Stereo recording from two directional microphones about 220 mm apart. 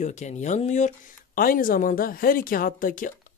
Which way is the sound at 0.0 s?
30° left (ahead or behind).